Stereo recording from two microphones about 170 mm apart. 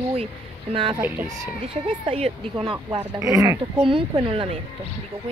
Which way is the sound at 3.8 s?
30° right (ahead or behind).